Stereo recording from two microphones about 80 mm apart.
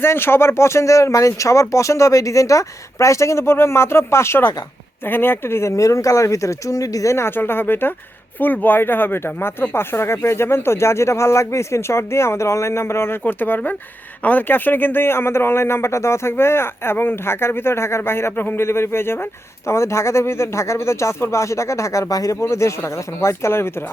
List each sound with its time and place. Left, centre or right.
0.0 s speech: left